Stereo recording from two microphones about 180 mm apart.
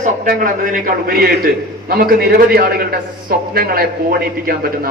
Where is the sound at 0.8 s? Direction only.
55° right (ahead or behind).